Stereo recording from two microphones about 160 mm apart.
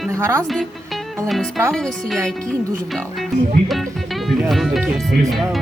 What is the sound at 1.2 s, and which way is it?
Speech, centre (ahead or behind).